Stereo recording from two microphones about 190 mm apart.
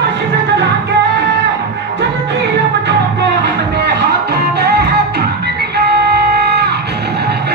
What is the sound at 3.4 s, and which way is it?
Music, 65° right (ahead or behind).